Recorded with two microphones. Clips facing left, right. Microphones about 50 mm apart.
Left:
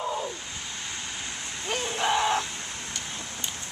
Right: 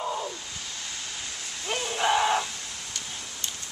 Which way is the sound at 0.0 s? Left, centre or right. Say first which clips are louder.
Even; centre.